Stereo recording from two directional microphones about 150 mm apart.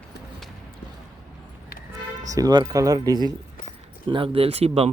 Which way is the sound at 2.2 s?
25° right (ahead or behind).